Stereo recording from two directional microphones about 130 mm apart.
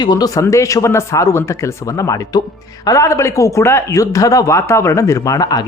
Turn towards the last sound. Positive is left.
turn(degrees=30)  # may be behind; listen again after turning